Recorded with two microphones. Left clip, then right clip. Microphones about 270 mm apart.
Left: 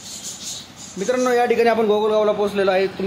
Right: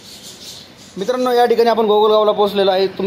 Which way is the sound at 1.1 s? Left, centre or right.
Centre.